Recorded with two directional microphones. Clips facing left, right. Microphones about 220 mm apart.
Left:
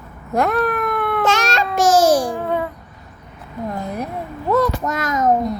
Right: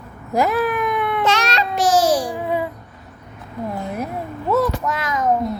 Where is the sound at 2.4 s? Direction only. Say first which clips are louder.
Left 1 dB; 5° right (ahead or behind).